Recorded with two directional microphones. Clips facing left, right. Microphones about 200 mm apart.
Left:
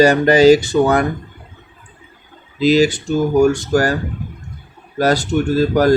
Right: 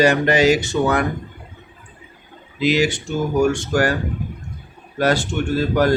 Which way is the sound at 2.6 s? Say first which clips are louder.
Left 5 dB; 35° left (ahead or behind).